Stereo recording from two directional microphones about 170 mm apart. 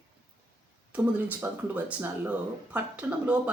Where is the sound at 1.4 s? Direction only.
15° right (ahead or behind).